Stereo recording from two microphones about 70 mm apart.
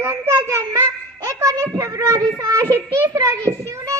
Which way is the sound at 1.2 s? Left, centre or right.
Right.